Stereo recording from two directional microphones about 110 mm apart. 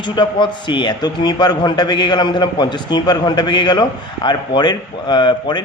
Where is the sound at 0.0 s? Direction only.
45° left (ahead or behind).